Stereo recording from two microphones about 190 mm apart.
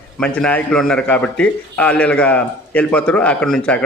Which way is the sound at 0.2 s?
5° left (ahead or behind).